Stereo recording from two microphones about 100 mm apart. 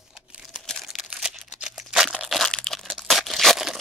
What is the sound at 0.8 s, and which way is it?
Crumpling, 5° right (ahead or behind).